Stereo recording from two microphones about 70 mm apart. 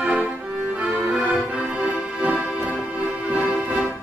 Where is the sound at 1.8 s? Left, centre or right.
Centre.